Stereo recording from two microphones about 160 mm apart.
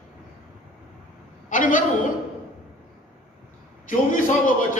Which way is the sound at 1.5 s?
55° left (ahead or behind).